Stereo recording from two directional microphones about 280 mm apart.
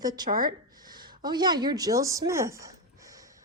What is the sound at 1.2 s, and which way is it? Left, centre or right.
A woman's voice, centre.